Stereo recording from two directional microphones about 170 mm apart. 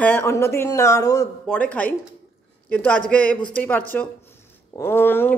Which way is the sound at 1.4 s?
10° left (ahead or behind).